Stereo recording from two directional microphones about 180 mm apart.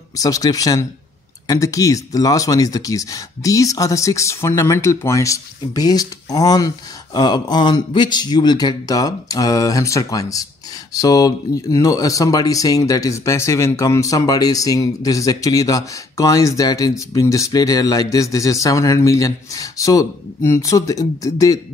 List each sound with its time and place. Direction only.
0.2 s speech: 20° left (ahead or behind)